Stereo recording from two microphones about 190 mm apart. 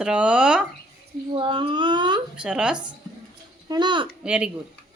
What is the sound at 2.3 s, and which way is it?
Speech, 5° right (ahead or behind).